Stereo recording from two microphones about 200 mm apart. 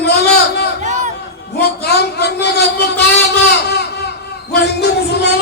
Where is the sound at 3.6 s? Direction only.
55° left (ahead or behind).